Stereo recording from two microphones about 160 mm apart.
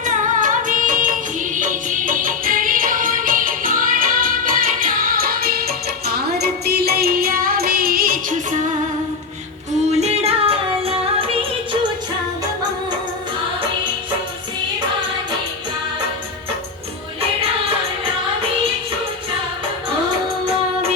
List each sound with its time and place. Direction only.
0.0 s music: 50° right (ahead or behind)
9.9 s music: 40° right (ahead or behind)